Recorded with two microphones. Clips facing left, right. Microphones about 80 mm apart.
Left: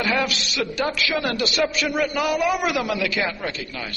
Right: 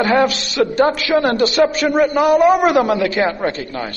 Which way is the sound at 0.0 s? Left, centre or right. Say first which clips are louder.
Right 8 dB; right.